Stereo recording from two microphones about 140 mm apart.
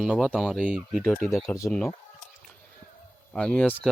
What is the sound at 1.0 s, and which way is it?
Speech, 10° left (ahead or behind).